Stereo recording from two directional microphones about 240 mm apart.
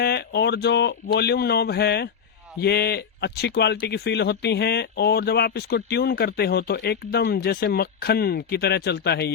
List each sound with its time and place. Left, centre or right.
0.0 s speech: left